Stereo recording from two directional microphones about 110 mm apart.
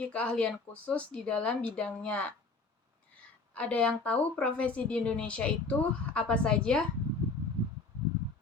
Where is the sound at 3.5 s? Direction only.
10° left (ahead or behind).